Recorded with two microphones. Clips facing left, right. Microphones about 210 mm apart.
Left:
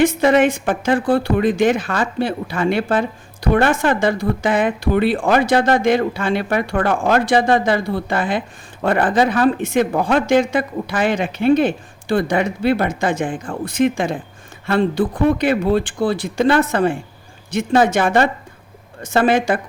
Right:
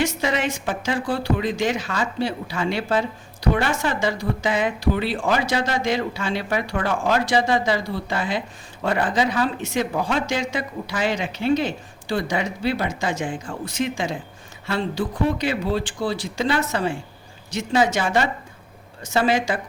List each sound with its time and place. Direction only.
0.0 s a woman's voice: 55° left (ahead or behind)